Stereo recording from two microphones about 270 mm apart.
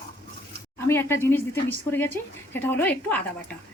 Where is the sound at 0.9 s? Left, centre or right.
Centre.